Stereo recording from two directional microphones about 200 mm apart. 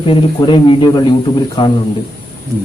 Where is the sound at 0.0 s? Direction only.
25° left (ahead or behind).